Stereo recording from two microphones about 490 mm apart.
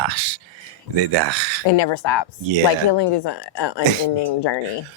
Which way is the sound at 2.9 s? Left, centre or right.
Left.